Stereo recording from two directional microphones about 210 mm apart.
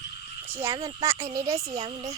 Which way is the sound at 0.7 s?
25° right (ahead or behind).